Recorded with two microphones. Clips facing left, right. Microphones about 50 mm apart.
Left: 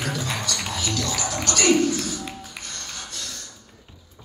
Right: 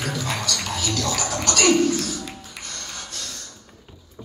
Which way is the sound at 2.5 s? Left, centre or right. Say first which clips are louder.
Right 1 dB; centre.